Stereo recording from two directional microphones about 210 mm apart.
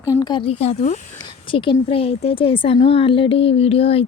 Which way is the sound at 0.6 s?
30° left (ahead or behind).